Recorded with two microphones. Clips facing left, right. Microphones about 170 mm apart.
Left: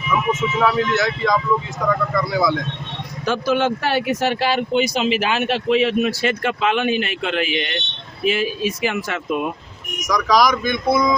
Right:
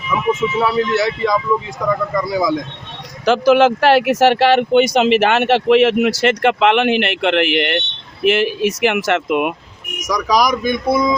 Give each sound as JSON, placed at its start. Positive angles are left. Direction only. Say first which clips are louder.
{"t": 0.3, "sound": "speech", "louder": "right 2 dB", "side_deg": -10}
{"t": 3.2, "sound": "speech", "louder": "right 7 dB", "side_deg": -90}
{"t": 10.1, "sound": "speech", "louder": "right 1 dB", "side_deg": -10}